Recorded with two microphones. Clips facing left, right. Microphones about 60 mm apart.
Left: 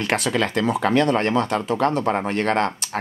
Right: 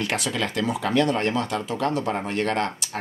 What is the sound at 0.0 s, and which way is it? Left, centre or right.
Speech, left.